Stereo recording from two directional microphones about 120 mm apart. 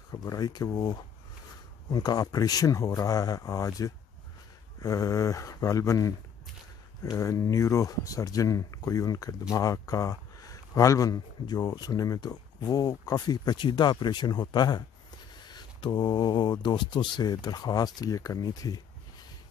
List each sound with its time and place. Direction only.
0.1 s speech: 30° left (ahead or behind)